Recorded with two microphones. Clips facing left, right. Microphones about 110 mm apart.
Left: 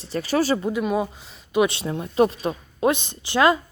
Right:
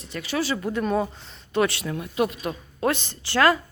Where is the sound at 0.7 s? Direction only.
10° left (ahead or behind).